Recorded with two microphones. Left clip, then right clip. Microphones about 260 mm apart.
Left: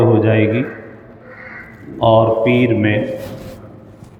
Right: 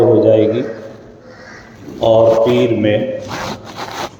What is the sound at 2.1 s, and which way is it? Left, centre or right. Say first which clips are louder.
Speech: right 3 dB; left.